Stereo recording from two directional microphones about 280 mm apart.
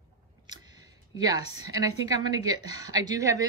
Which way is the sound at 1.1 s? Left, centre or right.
Centre.